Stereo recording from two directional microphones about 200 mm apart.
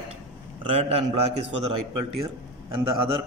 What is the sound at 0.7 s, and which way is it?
Speech, 30° right (ahead or behind).